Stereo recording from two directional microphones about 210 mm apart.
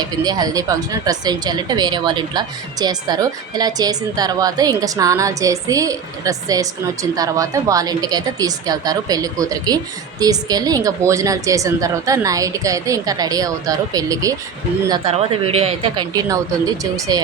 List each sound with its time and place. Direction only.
0.0 s speech: 20° right (ahead or behind)
16.8 s speech: 15° right (ahead or behind)